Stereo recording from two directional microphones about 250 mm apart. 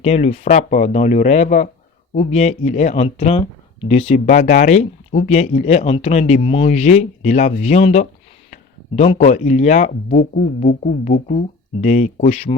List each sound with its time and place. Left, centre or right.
0.0 s speech: left
9.1 s speech: left